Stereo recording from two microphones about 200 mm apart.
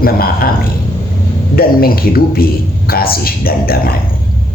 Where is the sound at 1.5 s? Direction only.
50° left (ahead or behind).